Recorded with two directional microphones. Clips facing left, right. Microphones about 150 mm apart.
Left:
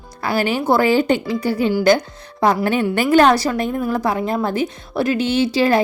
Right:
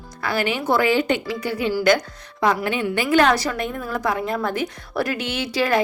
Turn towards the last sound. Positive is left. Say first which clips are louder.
# left 5 dB
turn(degrees=30)  # may be behind; listen again after turning